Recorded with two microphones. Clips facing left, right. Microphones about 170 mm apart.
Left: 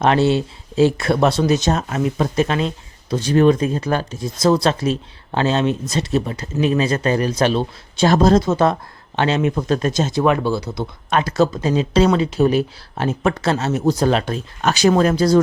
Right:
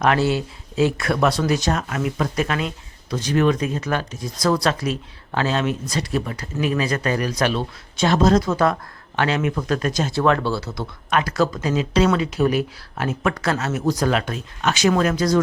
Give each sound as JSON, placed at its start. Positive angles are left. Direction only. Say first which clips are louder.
{"t": 0.0, "sound": "speech", "louder": "left 3 dB", "side_deg": 25}